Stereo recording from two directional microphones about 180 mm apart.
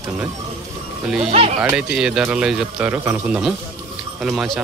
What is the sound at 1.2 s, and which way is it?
Speech, 35° right (ahead or behind).